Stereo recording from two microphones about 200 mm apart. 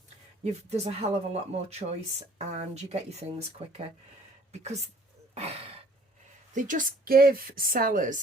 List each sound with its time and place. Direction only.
0.4 s speech: 30° right (ahead or behind)
5.3 s a sound: 30° right (ahead or behind)
6.5 s a woman's voice: 40° right (ahead or behind)